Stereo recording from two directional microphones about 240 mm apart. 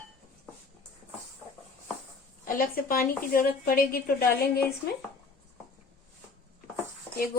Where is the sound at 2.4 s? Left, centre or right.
Left.